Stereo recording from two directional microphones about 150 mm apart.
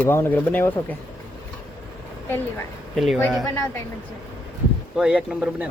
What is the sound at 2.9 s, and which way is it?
Speech, centre (ahead or behind).